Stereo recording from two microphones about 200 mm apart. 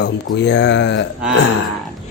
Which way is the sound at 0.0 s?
60° left (ahead or behind).